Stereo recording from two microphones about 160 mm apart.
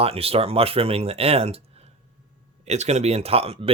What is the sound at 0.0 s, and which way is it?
Speech, 40° right (ahead or behind).